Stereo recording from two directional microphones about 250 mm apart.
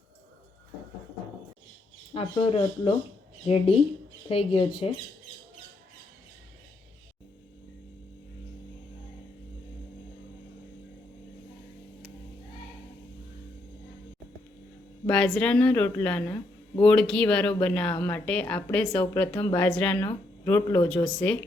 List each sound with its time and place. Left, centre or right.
2.1 s speech: left
15.0 s a woman's voice: centre